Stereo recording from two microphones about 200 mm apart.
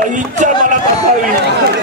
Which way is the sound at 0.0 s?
40° right (ahead or behind).